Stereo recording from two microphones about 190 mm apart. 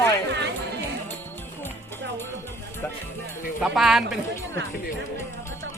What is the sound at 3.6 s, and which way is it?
Speech, centre (ahead or behind).